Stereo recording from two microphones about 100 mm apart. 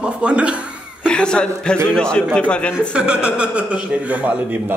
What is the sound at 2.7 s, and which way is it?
A man's voice, 10° right (ahead or behind).